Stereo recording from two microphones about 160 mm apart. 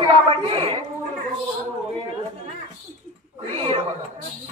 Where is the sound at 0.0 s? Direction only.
35° right (ahead or behind).